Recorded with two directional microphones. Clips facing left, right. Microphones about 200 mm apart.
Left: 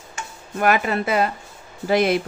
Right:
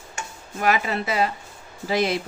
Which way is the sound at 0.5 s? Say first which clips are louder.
Left 3 dB; 55° left (ahead or behind).